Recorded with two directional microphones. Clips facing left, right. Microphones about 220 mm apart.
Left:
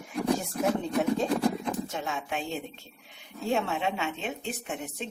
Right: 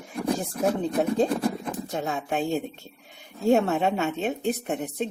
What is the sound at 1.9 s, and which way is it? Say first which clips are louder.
A woman's voice: right 5 dB; 40° right (ahead or behind).